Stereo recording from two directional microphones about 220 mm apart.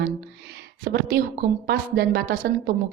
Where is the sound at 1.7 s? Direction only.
45° right (ahead or behind).